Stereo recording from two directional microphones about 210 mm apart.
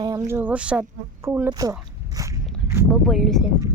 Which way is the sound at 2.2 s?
15° right (ahead or behind).